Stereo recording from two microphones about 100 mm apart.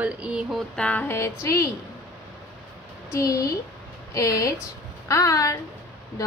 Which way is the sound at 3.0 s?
30° left (ahead or behind).